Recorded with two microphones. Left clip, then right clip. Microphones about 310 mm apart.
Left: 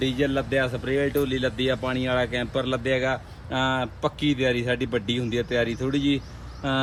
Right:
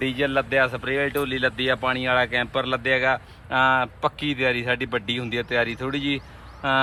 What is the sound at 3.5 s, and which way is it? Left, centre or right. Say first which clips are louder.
Speech: right 6 dB; centre.